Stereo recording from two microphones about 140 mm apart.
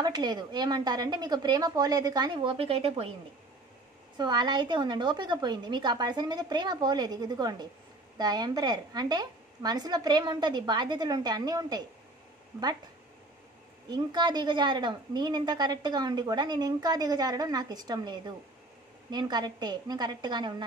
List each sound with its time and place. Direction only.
0.0 s a woman's voice: 30° right (ahead or behind)
4.2 s a woman's voice: 30° right (ahead or behind)
13.8 s a woman's voice: 30° right (ahead or behind)